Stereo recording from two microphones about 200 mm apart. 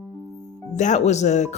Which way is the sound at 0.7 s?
35° left (ahead or behind).